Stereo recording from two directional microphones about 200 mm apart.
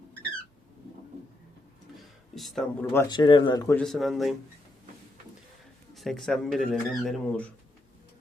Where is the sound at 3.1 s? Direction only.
25° left (ahead or behind).